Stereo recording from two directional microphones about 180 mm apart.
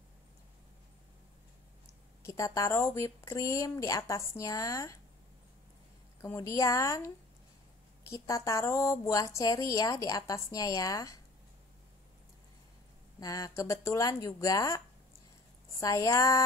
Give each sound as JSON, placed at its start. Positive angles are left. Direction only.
{"t": 2.2, "sound": "speech", "side_deg": 15}
{"t": 6.2, "sound": "speech", "side_deg": 15}
{"t": 8.1, "sound": "speech", "side_deg": 15}
{"t": 13.2, "sound": "speech", "side_deg": 20}